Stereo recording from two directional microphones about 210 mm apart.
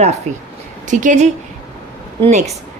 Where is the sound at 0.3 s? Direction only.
35° right (ahead or behind).